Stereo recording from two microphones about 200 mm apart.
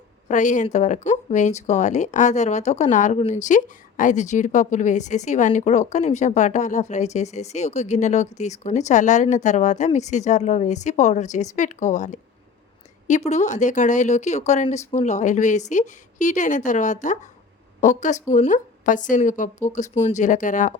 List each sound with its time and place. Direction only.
0.3 s speech: 40° left (ahead or behind)